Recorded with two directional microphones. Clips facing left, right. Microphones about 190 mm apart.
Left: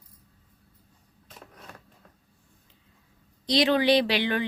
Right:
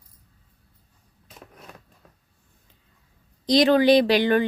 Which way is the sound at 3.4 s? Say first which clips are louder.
Right 5 dB; 45° right (ahead or behind).